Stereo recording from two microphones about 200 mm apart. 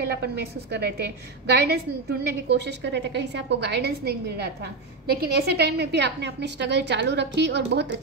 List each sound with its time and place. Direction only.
0.1 s a woman's voice: 55° right (ahead or behind)